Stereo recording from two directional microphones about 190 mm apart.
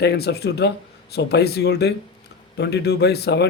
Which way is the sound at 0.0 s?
60° left (ahead or behind).